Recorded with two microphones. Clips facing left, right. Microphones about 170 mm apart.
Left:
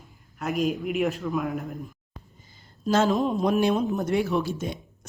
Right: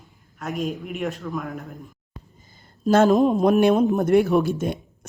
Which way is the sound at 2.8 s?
50° right (ahead or behind).